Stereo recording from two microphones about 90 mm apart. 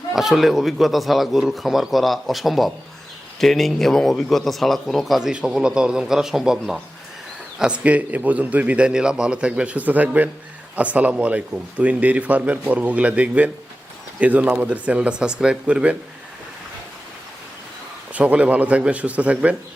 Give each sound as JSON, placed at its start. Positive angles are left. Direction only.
{"t": 0.1, "sound": "a man's voice", "side_deg": -5}
{"t": 18.1, "sound": "speech", "side_deg": -15}